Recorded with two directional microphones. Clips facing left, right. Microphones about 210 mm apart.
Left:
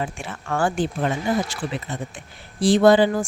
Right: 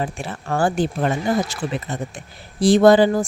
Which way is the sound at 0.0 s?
35° right (ahead or behind).